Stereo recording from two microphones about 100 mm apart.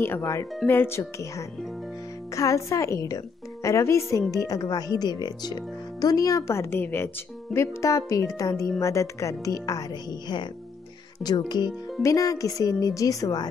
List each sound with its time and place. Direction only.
0.2 s speech: 30° left (ahead or behind)
12.0 s speech: 30° left (ahead or behind)